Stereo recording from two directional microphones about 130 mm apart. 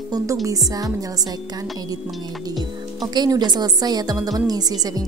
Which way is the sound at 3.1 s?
35° right (ahead or behind).